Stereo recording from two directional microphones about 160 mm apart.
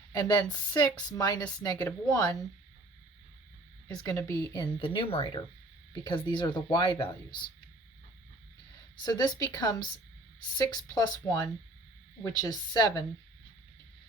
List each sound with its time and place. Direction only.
0.2 s speech: 25° left (ahead or behind)
3.8 s speech: 25° left (ahead or behind)
9.0 s speech: 25° left (ahead or behind)